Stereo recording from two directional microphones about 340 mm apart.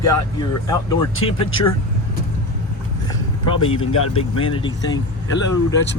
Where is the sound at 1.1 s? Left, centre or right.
Left.